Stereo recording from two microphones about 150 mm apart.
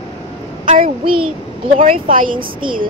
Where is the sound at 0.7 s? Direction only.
60° right (ahead or behind).